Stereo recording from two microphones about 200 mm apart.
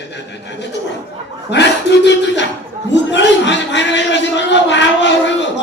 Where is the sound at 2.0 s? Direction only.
60° left (ahead or behind).